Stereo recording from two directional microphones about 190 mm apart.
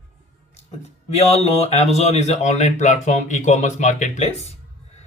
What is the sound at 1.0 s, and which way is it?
Speech, 35° left (ahead or behind).